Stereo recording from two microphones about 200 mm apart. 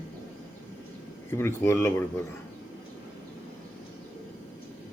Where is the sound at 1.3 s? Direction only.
10° left (ahead or behind).